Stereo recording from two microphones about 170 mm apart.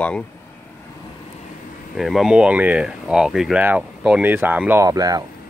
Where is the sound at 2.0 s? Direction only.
Centre (ahead or behind); by 5.2 s 20° right (ahead or behind).